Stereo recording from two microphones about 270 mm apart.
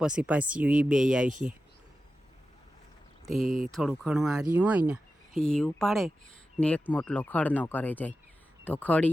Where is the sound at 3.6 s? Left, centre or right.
Centre.